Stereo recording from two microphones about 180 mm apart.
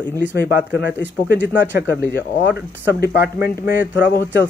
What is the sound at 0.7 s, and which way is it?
Speech, 70° left (ahead or behind).